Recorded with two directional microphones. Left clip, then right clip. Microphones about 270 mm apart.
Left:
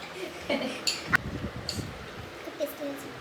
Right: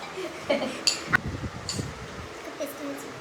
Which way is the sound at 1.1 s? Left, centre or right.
Centre.